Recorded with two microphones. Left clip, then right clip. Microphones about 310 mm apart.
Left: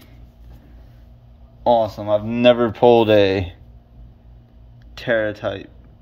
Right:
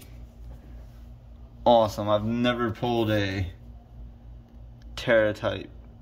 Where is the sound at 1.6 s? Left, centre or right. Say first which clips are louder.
Left 3 dB; centre.